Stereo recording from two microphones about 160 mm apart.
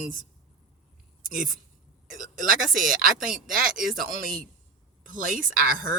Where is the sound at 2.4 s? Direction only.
60° right (ahead or behind).